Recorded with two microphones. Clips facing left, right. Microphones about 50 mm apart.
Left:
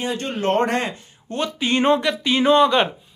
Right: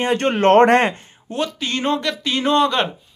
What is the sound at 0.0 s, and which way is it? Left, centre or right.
Speech, right.